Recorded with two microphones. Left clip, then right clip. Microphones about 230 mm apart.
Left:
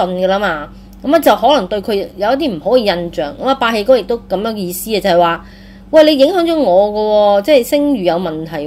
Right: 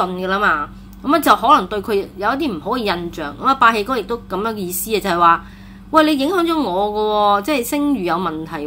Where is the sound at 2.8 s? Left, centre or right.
Right.